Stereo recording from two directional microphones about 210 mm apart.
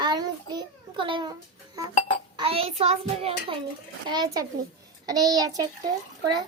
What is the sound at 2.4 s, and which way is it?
A child's voice, 25° right (ahead or behind).